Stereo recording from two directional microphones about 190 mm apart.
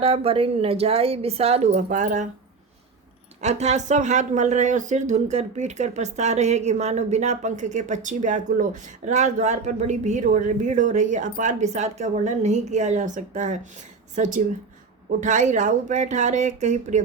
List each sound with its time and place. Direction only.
0.0 s speech: 30° right (ahead or behind)
3.4 s speech: 35° right (ahead or behind)